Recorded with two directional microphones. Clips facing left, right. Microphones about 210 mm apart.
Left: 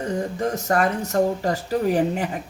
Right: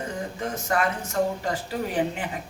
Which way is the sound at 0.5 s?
40° left (ahead or behind).